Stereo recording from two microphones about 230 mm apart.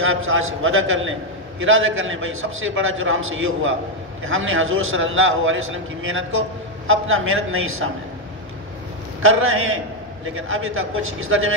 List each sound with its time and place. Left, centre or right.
0.0 s a man's voice: right
9.2 s a man's voice: right